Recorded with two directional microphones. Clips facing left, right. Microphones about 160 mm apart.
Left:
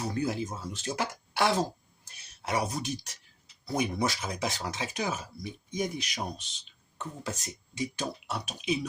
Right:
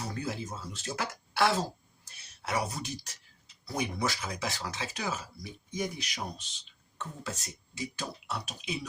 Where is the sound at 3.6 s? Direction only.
20° left (ahead or behind).